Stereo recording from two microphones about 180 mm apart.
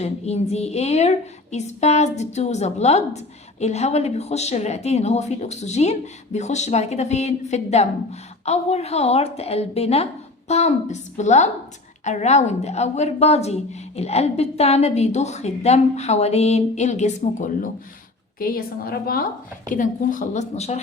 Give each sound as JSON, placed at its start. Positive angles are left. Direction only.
{"t": 0.0, "sound": "a woman's voice", "side_deg": 35}
{"t": 18.3, "sound": "a woman's voice", "side_deg": 55}